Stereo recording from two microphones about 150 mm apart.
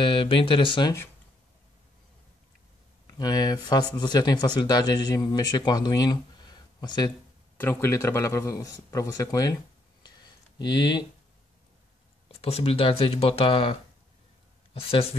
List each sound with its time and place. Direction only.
0.0 s speech: 35° left (ahead or behind)
3.2 s speech: 25° left (ahead or behind)
7.5 s speech: 15° left (ahead or behind)
10.0 s a sound: 30° left (ahead or behind)
12.3 s speech: 40° left (ahead or behind)